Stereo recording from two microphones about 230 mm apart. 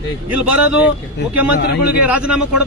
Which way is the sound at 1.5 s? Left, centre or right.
Left.